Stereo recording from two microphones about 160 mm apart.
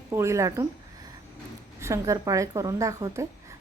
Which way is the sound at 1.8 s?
20° right (ahead or behind).